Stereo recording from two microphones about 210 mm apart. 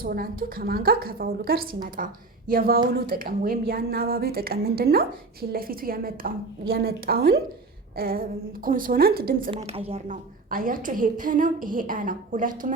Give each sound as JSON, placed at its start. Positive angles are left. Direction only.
{"t": 0.0, "sound": "speech", "side_deg": -45}
{"t": 9.5, "sound": "a woman's voice", "side_deg": -30}
{"t": 10.5, "sound": "a woman's voice", "side_deg": -40}